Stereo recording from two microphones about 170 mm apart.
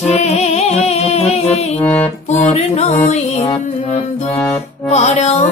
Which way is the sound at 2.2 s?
40° left (ahead or behind).